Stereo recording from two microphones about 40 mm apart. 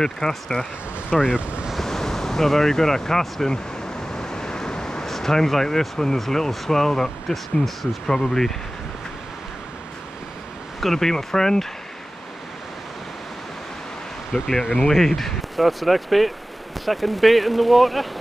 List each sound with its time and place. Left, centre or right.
0.0 s speech: centre
1.2 s speech: right
1.8 s speech: centre
4.1 s vehicle: centre
5.0 s speech: centre
10.8 s speech: centre
14.3 s speech: centre